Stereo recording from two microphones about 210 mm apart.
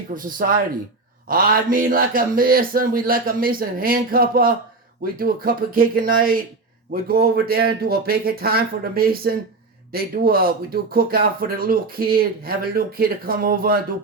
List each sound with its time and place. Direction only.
0.1 s speech: 40° right (ahead or behind)